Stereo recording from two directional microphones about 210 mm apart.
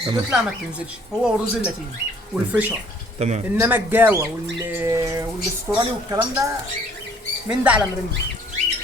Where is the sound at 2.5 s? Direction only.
10° right (ahead or behind).